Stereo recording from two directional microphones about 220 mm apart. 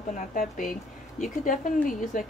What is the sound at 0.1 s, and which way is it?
A woman's voice, 35° left (ahead or behind).